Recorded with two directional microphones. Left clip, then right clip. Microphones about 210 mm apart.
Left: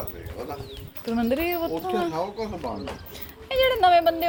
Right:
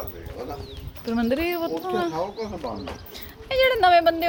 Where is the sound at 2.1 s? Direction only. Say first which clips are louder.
Even; 30° left (ahead or behind).